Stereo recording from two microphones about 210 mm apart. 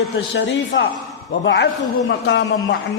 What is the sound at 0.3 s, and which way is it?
A man's voice, 60° left (ahead or behind).